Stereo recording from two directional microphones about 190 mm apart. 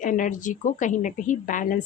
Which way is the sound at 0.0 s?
45° left (ahead or behind).